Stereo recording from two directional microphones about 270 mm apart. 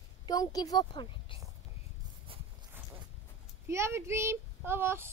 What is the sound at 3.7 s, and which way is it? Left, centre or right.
Speech, centre.